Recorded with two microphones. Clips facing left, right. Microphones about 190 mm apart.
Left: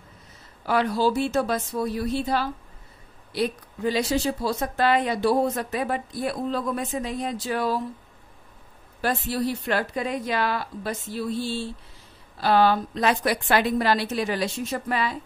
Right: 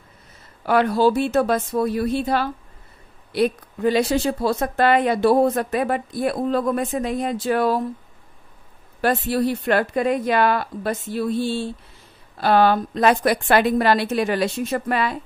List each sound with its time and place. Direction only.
0.7 s a woman's voice: 55° right (ahead or behind)
9.0 s a woman's voice: 60° right (ahead or behind)